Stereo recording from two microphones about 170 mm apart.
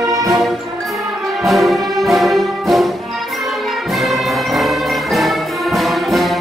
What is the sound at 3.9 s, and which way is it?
Music, centre (ahead or behind).